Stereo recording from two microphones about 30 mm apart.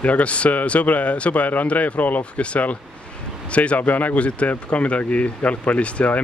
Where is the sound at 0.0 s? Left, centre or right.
Left.